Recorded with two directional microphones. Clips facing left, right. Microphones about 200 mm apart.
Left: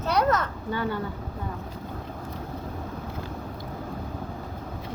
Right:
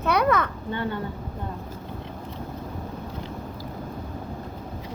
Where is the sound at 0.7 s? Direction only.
25° right (ahead or behind).